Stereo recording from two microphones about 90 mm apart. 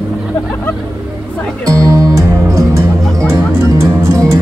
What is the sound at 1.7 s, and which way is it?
Music, 35° right (ahead or behind).